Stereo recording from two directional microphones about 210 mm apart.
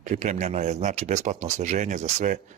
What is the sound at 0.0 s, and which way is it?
Speech, 35° right (ahead or behind).